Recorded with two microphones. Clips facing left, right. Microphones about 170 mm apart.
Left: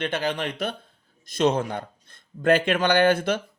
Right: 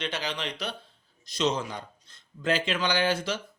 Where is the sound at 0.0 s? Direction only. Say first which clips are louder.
Left 6 dB; 55° left (ahead or behind).